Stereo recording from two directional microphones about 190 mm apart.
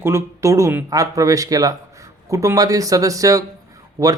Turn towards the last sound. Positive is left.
turn(degrees=-20)  # may be behind; listen again after turning